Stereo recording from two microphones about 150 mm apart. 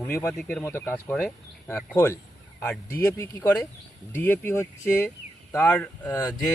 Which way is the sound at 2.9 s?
15° left (ahead or behind).